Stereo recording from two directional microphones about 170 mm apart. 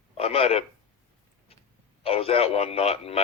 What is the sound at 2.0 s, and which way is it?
A man's voice, 35° left (ahead or behind).